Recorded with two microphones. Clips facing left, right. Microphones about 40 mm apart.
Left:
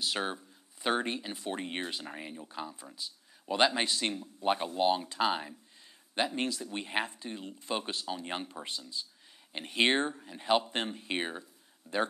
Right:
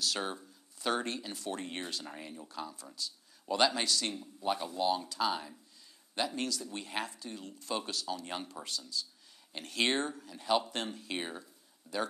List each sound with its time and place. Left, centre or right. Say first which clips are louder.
0.0 s speech: left 2 dB; left